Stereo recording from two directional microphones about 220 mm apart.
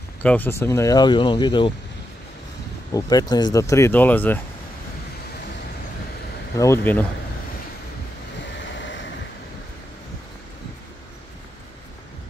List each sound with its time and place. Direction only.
0.2 s speech: 5° left (ahead or behind)
2.9 s speech: 15° left (ahead or behind)
6.6 s speech: 10° left (ahead or behind)
8.5 s vehicle: 55° left (ahead or behind)